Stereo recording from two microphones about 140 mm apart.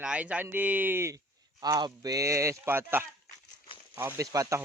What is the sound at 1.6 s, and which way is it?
A man's voice, 30° right (ahead or behind).